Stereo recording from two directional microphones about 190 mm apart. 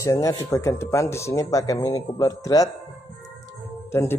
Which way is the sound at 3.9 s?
15° left (ahead or behind).